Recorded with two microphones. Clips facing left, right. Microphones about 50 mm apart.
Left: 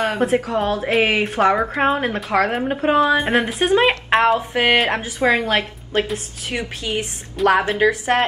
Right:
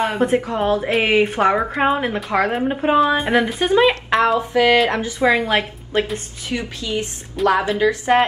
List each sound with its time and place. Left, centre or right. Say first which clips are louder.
0.0 s speech: right 1 dB; centre
3.5 s speech: even; left
3.9 s a woman's voice: left 1 dB; left
5.2 s speech: right 1 dB; centre
6.5 s a woman's voice: even; left